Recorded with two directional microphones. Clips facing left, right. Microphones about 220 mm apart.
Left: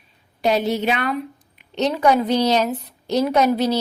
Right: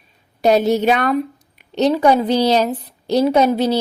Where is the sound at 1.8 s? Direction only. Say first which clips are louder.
Right 4 dB; 35° right (ahead or behind).